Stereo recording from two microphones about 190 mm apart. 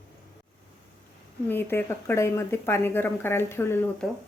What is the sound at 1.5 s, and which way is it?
Speech, 10° left (ahead or behind).